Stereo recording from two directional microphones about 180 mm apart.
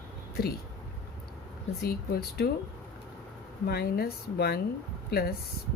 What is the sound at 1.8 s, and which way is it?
Speech, 60° left (ahead or behind).